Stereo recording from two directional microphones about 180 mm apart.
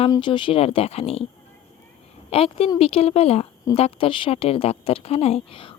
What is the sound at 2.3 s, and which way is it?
A woman's voice, 30° left (ahead or behind).